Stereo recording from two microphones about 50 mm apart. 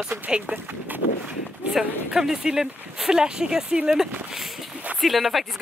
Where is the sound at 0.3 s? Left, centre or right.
Centre.